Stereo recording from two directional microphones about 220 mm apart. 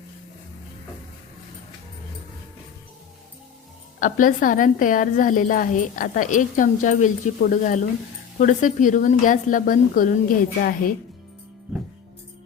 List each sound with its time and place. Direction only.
4.0 s speech: 40° left (ahead or behind)